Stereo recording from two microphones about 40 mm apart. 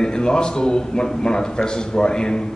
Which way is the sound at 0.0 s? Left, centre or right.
Centre.